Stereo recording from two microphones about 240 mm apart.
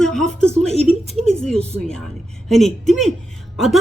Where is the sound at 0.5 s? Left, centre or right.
Right.